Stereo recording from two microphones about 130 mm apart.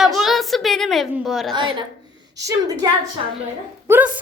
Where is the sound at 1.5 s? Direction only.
35° right (ahead or behind).